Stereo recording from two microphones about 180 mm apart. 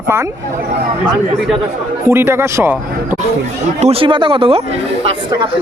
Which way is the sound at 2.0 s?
15° right (ahead or behind).